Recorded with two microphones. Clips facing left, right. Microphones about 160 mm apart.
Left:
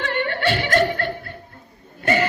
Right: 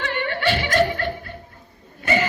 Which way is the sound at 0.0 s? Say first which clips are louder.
Left 1 dB; 55° left (ahead or behind).